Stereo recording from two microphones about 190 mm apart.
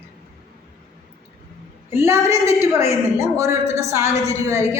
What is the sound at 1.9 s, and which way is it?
A woman's voice, 15° right (ahead or behind).